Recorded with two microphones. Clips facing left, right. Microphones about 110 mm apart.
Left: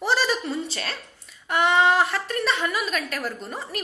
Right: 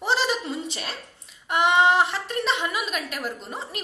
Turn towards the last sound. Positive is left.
turn(degrees=-20)  # may be behind; listen again after turning